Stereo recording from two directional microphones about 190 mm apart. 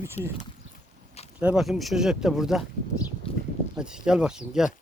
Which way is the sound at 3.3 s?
30° left (ahead or behind).